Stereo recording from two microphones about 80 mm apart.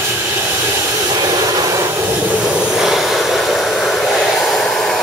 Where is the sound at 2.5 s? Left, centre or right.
Centre.